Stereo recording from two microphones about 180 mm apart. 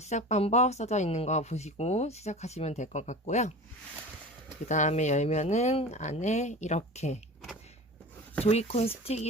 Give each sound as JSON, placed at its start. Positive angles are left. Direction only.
{"t": 0.0, "sound": "speech", "side_deg": 40}
{"t": 4.7, "sound": "speech", "side_deg": 40}
{"t": 8.4, "sound": "speech", "side_deg": 35}